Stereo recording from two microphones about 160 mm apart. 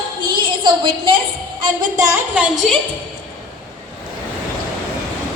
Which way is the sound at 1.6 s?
20° right (ahead or behind).